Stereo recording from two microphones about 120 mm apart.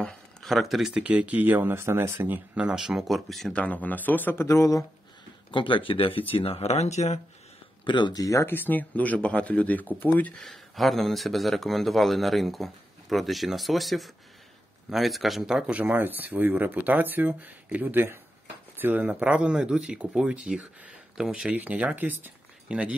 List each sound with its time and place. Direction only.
0.0 s speech: 5° left (ahead or behind); by 4.8 s 25° left (ahead or behind)
5.5 s speech: 45° left (ahead or behind); by 7.2 s 70° left (ahead or behind)
7.8 s speech: 40° left (ahead or behind); by 10.4 s 15° left (ahead or behind)
10.4 s speech: centre (ahead or behind)